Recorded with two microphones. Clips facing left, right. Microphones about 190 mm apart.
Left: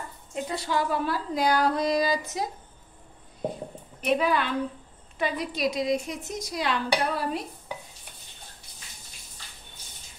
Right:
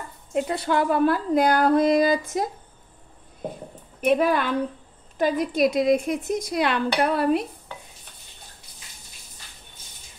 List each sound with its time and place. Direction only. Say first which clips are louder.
0.3 s speech: right 6 dB; 60° right (ahead or behind)
4.0 s a woman's voice: right 4 dB; 50° right (ahead or behind); by 7.4 s 65° right (ahead or behind)